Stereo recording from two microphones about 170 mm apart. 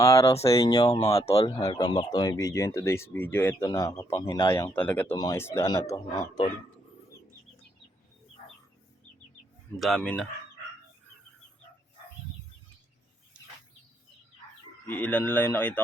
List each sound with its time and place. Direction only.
0.0 s speech: 15° left (ahead or behind)
0.3 s speech: 35° left (ahead or behind)
0.6 s speech: 20° left (ahead or behind)
0.9 s speech: 35° left (ahead or behind)
1.5 s speech: 25° left (ahead or behind)
4.3 s speech: 30° left (ahead or behind)
4.5 s speech: 10° left (ahead or behind)
9.7 s speech: centre (ahead or behind)
14.8 s speech: 10° left (ahead or behind)